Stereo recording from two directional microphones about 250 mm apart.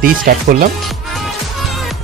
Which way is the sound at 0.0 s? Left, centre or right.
Right.